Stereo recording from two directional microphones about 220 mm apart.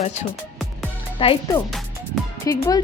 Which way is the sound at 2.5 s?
15° left (ahead or behind).